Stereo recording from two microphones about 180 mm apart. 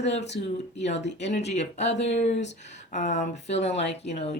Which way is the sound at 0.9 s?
75° left (ahead or behind).